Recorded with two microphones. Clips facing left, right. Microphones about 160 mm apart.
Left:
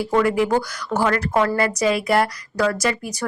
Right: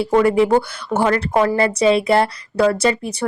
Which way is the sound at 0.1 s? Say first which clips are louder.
Right 4 dB; 25° right (ahead or behind).